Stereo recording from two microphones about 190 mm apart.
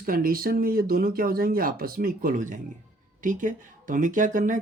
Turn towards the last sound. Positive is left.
turn(degrees=-45)  # may be behind; listen again after turning